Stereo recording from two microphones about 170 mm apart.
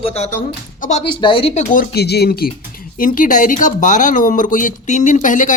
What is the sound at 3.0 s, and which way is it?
Speech, 50° left (ahead or behind).